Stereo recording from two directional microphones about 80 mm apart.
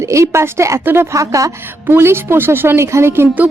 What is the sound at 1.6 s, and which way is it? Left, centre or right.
Speech, right.